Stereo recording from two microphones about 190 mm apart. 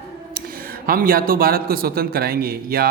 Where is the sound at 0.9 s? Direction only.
50° right (ahead or behind).